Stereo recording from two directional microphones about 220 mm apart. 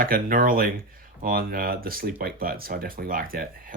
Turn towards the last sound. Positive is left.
turn(degrees=-40)  # may be behind; listen again after turning